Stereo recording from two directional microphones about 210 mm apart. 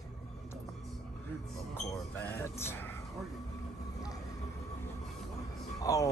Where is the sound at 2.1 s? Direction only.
10° left (ahead or behind).